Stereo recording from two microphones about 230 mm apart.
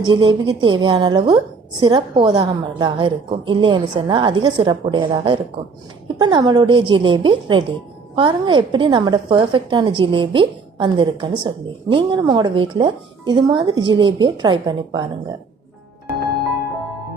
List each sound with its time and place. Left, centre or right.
0.0 s a woman's voice: right